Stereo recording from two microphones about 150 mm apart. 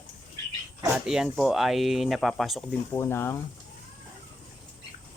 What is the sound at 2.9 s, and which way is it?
Speech, 15° left (ahead or behind).